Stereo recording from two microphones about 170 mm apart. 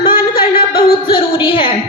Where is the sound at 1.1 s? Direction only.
30° left (ahead or behind).